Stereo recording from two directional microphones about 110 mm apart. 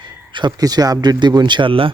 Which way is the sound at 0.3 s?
40° right (ahead or behind).